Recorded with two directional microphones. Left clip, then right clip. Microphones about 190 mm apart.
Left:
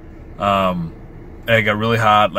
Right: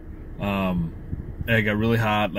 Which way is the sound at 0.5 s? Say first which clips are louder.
Left 10 dB; 50° left (ahead or behind).